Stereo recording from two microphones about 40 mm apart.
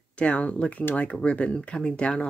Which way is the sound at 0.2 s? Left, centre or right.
Left.